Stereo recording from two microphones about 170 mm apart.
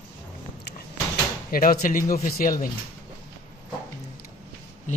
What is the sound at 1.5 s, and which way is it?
Speech, 55° left (ahead or behind).